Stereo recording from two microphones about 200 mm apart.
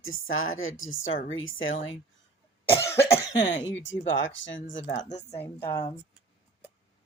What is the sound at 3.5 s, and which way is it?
Speech, 70° left (ahead or behind).